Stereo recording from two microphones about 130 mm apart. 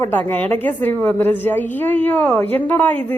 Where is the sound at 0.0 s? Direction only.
15° left (ahead or behind).